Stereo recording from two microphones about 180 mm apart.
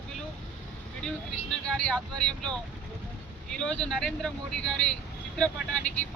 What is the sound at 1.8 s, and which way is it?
Speech, 5° left (ahead or behind).